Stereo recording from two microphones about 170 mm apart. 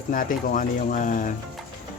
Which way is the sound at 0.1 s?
50° left (ahead or behind).